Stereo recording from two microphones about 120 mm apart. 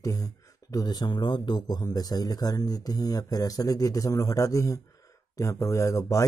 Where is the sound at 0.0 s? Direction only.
30° left (ahead or behind).